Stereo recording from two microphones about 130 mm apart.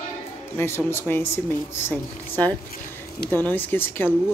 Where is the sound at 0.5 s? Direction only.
20° left (ahead or behind).